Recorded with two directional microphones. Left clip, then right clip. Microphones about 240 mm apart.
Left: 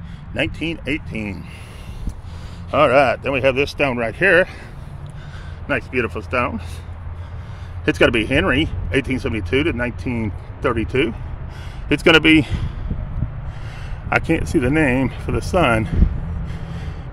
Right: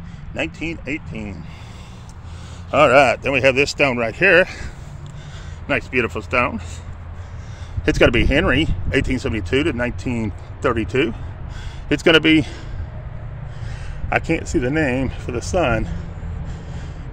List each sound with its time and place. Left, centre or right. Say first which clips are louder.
0.3 s speech: left 2 dB; centre
2.7 s speech: right 1 dB; centre
5.7 s speech: right 1 dB; centre
7.8 s speech: even; centre
14.0 s speech: left 1 dB; centre
16.4 s vehicle: left 2 dB; centre